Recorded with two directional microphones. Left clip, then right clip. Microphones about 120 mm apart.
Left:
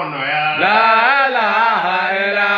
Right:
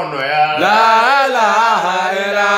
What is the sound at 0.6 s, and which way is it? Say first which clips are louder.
Mantra: even; 25° right (ahead or behind).